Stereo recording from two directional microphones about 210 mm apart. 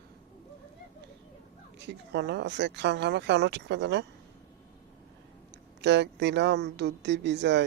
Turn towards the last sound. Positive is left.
turn(degrees=-55)  # may be behind; listen again after turning